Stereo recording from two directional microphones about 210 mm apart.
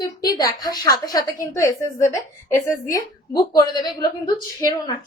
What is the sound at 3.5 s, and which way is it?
A woman's voice, 20° left (ahead or behind).